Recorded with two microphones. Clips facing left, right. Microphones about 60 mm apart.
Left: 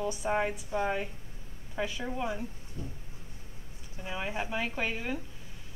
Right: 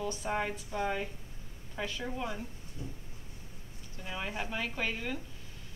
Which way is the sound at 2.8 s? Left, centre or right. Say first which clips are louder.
Left 2 dB; left.